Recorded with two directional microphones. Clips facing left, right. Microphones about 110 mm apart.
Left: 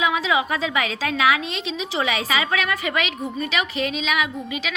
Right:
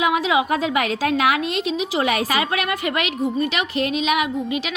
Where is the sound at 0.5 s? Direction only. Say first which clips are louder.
Right 4 dB; 50° right (ahead or behind).